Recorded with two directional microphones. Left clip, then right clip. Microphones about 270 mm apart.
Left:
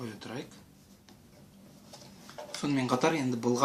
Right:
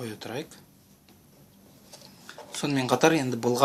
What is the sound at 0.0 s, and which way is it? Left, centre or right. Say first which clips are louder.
Speech: right 6 dB; right.